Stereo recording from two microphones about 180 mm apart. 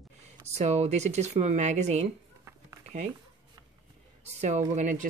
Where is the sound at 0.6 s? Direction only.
40° right (ahead or behind).